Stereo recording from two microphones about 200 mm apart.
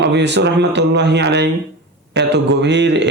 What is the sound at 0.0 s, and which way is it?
Speech, 60° right (ahead or behind).